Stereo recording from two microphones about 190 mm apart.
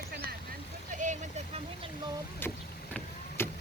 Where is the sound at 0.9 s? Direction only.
40° right (ahead or behind).